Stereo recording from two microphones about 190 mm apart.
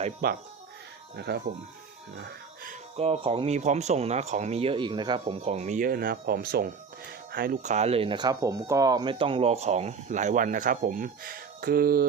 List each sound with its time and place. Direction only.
0.2 s speech: 55° right (ahead or behind)
2.9 s speech: 30° right (ahead or behind); by 12.0 s 50° right (ahead or behind)